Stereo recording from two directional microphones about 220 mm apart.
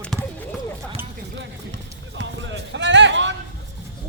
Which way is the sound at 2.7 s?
55° right (ahead or behind).